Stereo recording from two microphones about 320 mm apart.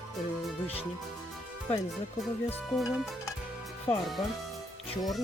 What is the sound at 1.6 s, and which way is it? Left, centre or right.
Speech, centre.